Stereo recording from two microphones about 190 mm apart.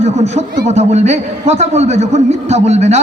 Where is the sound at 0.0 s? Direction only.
35° right (ahead or behind).